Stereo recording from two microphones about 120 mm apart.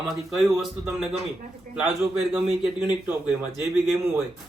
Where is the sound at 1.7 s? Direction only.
5° right (ahead or behind).